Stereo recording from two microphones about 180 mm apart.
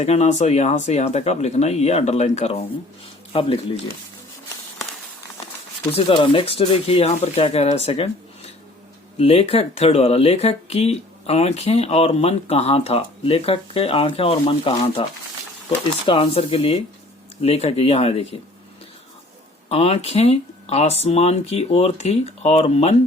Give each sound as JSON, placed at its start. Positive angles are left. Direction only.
{"t": 0.0, "sound": "speech", "side_deg": 35}
{"t": 6.1, "sound": "speech", "side_deg": 30}
{"t": 16.0, "sound": "speech", "side_deg": 30}
{"t": 19.6, "sound": "speech", "side_deg": 35}